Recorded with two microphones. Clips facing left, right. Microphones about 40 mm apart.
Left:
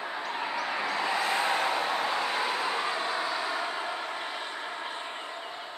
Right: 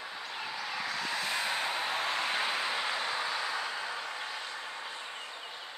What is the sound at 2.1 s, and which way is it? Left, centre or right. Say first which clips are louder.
Vehicle: left 3 dB; left.